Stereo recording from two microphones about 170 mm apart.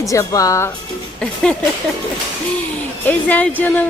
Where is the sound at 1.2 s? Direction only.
5° left (ahead or behind).